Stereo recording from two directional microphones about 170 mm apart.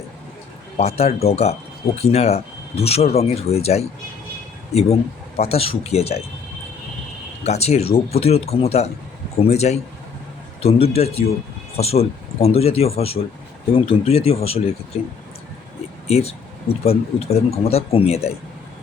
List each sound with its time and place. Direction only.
0.8 s speech: 35° left (ahead or behind)
7.4 s speech: 40° left (ahead or behind)
16.0 s speech: 35° left (ahead or behind)